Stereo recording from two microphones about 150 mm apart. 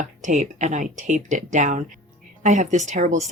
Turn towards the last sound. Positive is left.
turn(degrees=-55)  # may be behind; listen again after turning